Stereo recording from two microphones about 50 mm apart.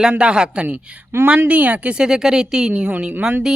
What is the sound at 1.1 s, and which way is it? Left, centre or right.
Speech, right.